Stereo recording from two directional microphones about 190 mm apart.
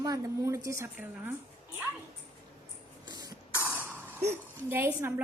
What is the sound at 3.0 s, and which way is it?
Cough, 20° right (ahead or behind).